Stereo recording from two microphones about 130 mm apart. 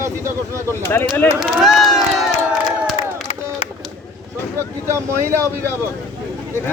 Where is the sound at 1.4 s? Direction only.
Centre (ahead or behind).